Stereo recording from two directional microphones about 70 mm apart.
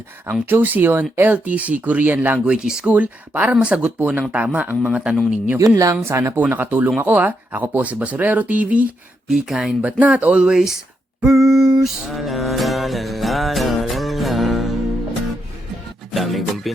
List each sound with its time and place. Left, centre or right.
0.4 s speech: right
2.4 s speech: centre
2.9 s speech: right
5.5 s speech: right
5.9 s speech: right
9.3 s speech: centre
9.8 s speech: right
11.2 s music: centre
16.1 s music: centre